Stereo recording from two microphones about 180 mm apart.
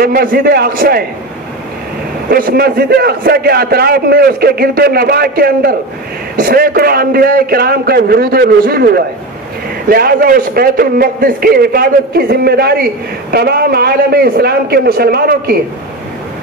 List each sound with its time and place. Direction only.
0.0 s a man's voice: 55° right (ahead or behind)
2.2 s a man's voice: 55° right (ahead or behind)